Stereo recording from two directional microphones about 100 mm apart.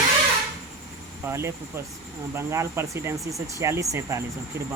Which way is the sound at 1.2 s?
25° right (ahead or behind).